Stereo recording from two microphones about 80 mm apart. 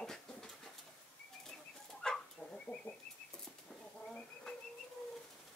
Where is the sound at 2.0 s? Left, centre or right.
Centre.